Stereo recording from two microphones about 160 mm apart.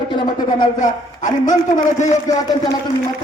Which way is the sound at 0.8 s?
50° left (ahead or behind).